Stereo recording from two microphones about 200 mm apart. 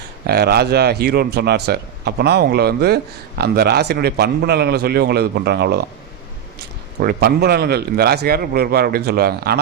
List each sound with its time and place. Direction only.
0.3 s a man's voice: 55° right (ahead or behind)
7.0 s a man's voice: 50° right (ahead or behind)